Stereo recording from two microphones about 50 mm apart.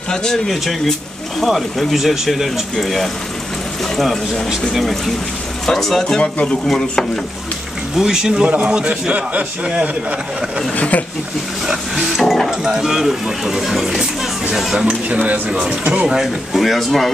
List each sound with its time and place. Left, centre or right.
0.1 s speech: centre
5.7 s speech: centre
8.0 s a man's voice: centre
10.8 s speech: left
11.6 s printer: centre
12.2 s speech: centre
12.4 s speech: centre
14.9 s a man's voice: right
16.5 s speech: centre